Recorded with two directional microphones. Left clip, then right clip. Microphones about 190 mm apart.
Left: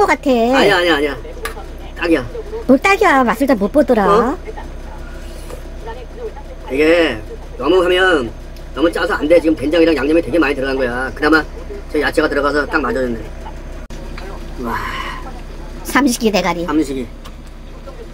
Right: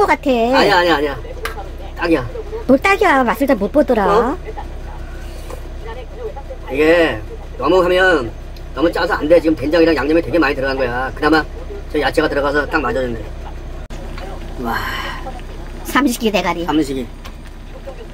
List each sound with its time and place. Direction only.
0.0 s speech: 10° left (ahead or behind)
6.8 s speech: 5° left (ahead or behind)
15.9 s speech: 15° left (ahead or behind)
16.6 s a woman's voice: 15° right (ahead or behind)